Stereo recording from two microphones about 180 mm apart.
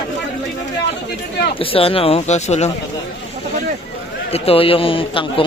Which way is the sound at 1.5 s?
30° left (ahead or behind).